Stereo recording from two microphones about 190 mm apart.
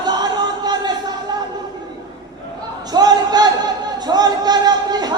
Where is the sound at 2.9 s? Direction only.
20° right (ahead or behind).